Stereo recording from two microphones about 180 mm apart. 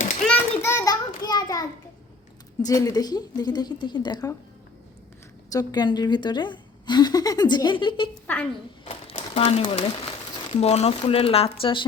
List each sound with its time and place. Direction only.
0.3 s child singing: 15° left (ahead or behind)
2.6 s a woman's voice: 20° left (ahead or behind)
5.5 s a woman's voice: 20° left (ahead or behind)
8.8 s a sound: 30° left (ahead or behind)
9.1 s speech: 35° left (ahead or behind)